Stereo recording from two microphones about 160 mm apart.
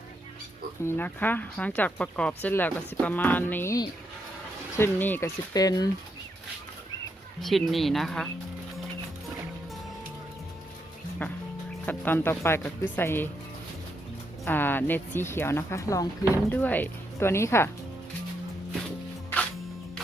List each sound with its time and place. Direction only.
0.9 s speech: 10° left (ahead or behind)
5.5 s speech: 25° left (ahead or behind)
7.4 s speech: centre (ahead or behind)
11.2 s speech: 10° left (ahead or behind)
14.4 s speech: 15° left (ahead or behind)